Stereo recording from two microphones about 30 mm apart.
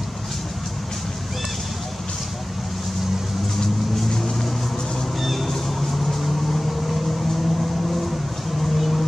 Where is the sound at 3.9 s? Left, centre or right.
Centre.